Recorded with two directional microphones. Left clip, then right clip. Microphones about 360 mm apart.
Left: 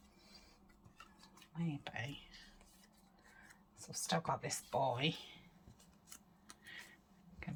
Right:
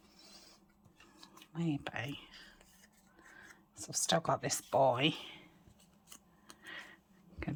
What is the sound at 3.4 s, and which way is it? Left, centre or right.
Speech, centre.